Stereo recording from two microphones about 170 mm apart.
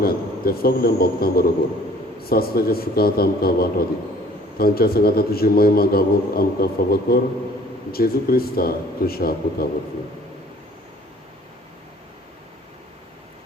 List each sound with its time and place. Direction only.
0.0 s a man's voice: 60° left (ahead or behind)